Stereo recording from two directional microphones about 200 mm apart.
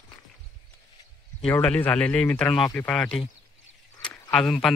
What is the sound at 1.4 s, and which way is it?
Speech, 5° left (ahead or behind).